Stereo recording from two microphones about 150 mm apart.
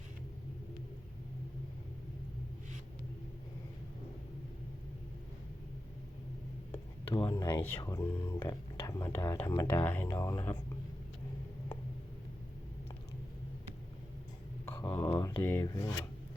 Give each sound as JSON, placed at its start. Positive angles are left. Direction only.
{"t": 7.3, "sound": "speech", "side_deg": 20}
{"t": 14.7, "sound": "a sound", "side_deg": 15}
{"t": 15.4, "sound": "speech", "side_deg": 15}